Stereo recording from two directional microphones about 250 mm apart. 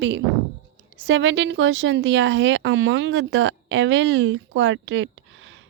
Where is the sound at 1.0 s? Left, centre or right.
Right.